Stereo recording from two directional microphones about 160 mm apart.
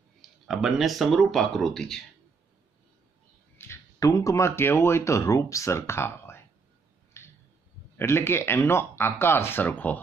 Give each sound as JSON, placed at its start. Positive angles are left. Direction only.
{"t": 0.2, "sound": "speech", "side_deg": 0}
{"t": 3.5, "sound": "speech", "side_deg": 15}
{"t": 7.2, "sound": "a sound", "side_deg": 15}
{"t": 8.0, "sound": "speech", "side_deg": 15}